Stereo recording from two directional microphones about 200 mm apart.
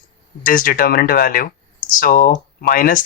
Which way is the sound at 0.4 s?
45° left (ahead or behind).